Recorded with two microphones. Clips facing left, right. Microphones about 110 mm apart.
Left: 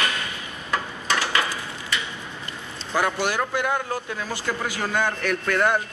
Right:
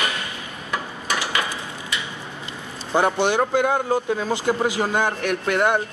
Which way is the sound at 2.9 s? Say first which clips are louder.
Right 4 dB; 25° right (ahead or behind).